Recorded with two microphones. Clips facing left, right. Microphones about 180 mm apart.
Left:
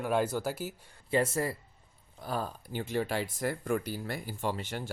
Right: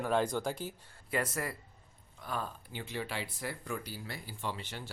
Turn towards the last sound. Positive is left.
turn(degrees=50)  # may be behind; listen again after turning